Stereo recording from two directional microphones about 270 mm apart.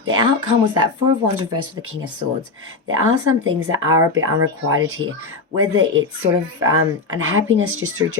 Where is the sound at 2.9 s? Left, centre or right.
Right.